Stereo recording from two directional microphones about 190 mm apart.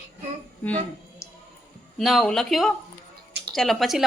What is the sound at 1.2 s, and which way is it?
Music, 15° left (ahead or behind).